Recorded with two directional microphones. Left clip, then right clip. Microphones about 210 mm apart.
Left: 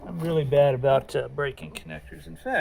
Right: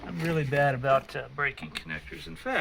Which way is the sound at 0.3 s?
50° left (ahead or behind).